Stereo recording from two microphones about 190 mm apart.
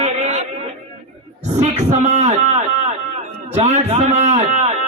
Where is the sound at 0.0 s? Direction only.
40° right (ahead or behind).